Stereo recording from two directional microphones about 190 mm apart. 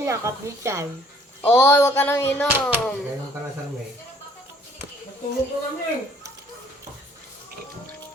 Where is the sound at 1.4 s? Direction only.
10° left (ahead or behind).